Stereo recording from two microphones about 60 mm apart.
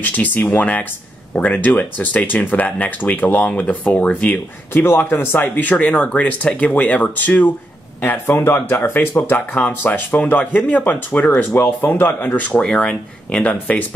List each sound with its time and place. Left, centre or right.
0.0 s speech: left
4.8 s speech: left
8.3 s speech: left
11.5 s speech: left
12.6 s speech: centre